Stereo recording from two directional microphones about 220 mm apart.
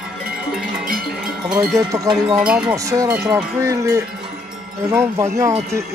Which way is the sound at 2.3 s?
5° right (ahead or behind).